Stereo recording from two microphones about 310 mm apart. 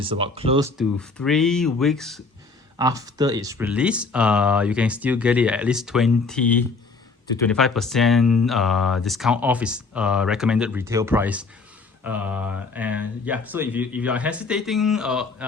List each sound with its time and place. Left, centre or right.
0.0 s speech: centre
0.8 s speech: centre
2.7 s speech: centre